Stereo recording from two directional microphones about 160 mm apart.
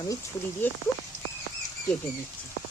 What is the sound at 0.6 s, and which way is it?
Speech, 10° left (ahead or behind).